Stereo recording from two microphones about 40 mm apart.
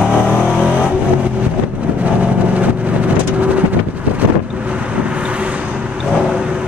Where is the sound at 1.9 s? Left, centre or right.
Right.